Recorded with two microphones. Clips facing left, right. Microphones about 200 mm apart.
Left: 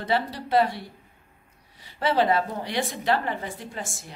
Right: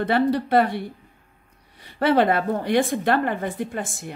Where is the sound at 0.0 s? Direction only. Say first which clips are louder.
Right 7 dB; 60° right (ahead or behind).